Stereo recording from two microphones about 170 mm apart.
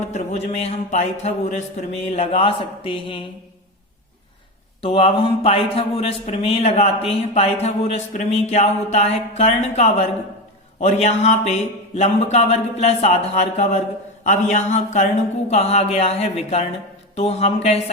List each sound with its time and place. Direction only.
0.0 s speech: 40° left (ahead or behind)
4.8 s speech: 35° left (ahead or behind)